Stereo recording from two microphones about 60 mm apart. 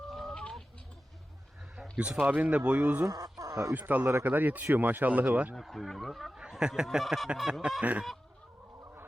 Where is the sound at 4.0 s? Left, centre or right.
Right.